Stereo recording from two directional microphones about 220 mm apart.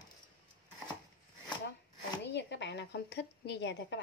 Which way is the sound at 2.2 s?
50° left (ahead or behind).